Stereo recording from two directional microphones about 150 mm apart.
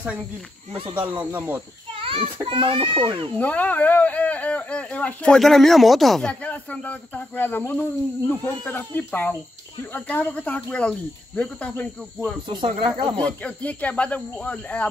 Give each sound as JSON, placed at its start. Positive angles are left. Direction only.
{"t": 1.2, "sound": "speech", "side_deg": -15}
{"t": 2.0, "sound": "child singing", "side_deg": -35}
{"t": 2.4, "sound": "a child's voice", "side_deg": -35}
{"t": 3.3, "sound": "speech", "side_deg": 10}
{"t": 12.4, "sound": "a child's voice", "side_deg": -30}
{"t": 13.2, "sound": "speech", "side_deg": 10}